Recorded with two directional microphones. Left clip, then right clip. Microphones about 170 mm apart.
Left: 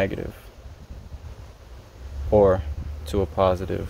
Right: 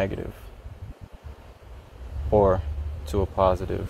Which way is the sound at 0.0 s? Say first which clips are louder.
Left 2 dB; 25° left (ahead or behind).